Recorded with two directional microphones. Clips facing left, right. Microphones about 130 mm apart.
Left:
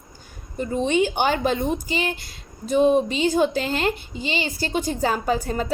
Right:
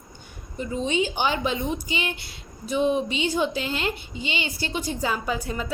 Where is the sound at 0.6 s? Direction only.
55° left (ahead or behind).